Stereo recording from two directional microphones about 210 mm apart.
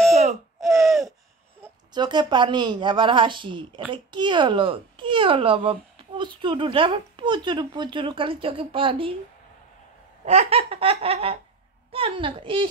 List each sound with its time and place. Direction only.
0.1 s a sound: 30° right (ahead or behind)
0.6 s laughter: centre (ahead or behind)
1.6 s a child's voice: 20° right (ahead or behind)
10.2 s a child's voice: 30° right (ahead or behind)